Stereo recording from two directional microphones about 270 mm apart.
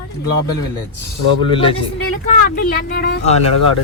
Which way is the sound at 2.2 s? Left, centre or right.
Left.